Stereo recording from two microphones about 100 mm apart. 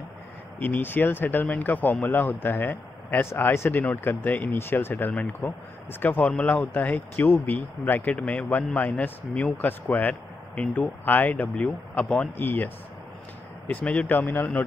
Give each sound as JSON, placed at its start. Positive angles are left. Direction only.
{"t": 0.6, "sound": "speech", "side_deg": 20}
{"t": 8.1, "sound": "speech", "side_deg": 10}